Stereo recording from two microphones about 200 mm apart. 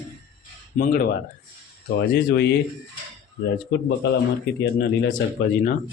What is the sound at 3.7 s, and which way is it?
Speech, 60° left (ahead or behind).